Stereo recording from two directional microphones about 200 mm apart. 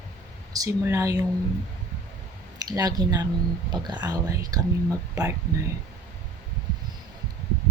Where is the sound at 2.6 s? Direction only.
20° right (ahead or behind).